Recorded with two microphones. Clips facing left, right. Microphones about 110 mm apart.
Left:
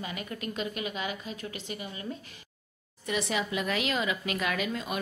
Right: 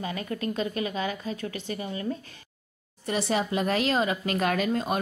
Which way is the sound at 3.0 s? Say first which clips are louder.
Right 4 dB; 35° right (ahead or behind).